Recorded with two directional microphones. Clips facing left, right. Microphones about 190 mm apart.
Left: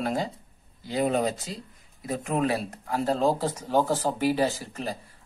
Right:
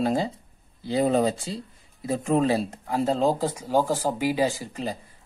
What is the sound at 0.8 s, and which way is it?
Speech, 30° right (ahead or behind).